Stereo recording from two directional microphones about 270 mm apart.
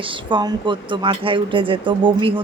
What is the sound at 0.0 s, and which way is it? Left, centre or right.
Speech, centre.